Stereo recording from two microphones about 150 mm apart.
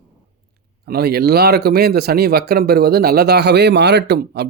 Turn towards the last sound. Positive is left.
turn(degrees=-90)